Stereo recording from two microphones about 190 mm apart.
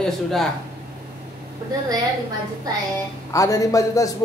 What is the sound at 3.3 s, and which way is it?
Speech, 15° left (ahead or behind).